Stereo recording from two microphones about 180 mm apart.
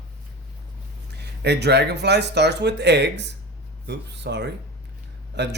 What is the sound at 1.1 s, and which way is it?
Speech, 65° right (ahead or behind).